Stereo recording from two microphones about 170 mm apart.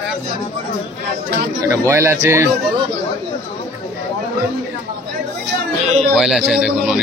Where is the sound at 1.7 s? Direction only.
15° right (ahead or behind).